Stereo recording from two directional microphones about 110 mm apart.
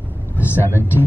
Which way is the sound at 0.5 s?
20° left (ahead or behind).